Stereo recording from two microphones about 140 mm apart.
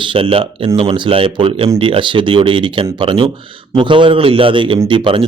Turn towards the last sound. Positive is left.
turn(degrees=-35)  # may be behind; listen again after turning